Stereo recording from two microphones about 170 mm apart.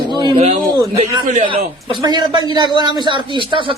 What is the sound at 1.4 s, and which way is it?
A man's voice, 25° right (ahead or behind).